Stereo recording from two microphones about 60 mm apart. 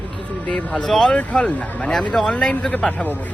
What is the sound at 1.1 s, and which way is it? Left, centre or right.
Speech, left.